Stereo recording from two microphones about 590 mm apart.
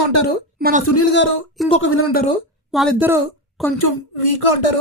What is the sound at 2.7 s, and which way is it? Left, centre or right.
A woman's voice, centre.